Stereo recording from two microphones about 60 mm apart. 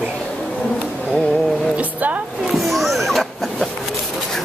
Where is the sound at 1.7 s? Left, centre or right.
Right.